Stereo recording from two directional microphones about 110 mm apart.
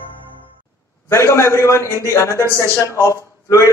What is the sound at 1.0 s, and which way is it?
A man's voice, 25° left (ahead or behind).